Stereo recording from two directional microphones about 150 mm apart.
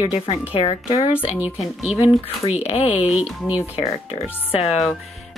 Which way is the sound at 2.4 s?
45° left (ahead or behind).